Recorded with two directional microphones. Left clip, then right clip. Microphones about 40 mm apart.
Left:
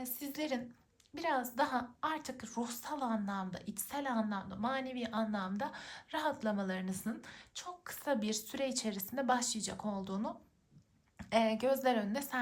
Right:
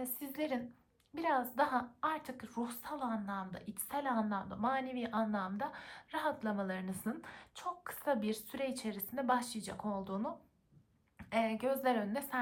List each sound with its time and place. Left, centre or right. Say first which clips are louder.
0.2 s a woman's voice: left 1 dB; centre; by 3.6 s left
3.6 s a woman's voice: left 3 dB; centre
3.8 s a woman's voice: right 1 dB; centre
7.6 s a woman's voice: right 4 dB; right
7.9 s a woman's voice: left 1 dB; centre
11.2 s speech: left 3 dB; left
11.6 s a woman's voice: left 2 dB; centre